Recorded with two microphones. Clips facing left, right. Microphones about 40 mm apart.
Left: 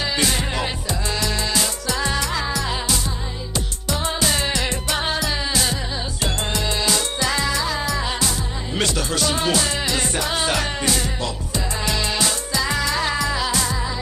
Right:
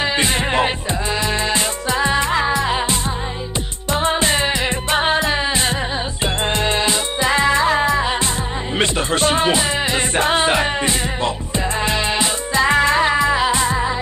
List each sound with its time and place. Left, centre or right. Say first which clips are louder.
0.0 s music: right 4 dB; right
6.9 s music: right 4 dB; right